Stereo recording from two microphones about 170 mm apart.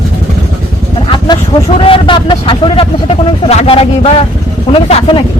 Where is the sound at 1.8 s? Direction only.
30° left (ahead or behind).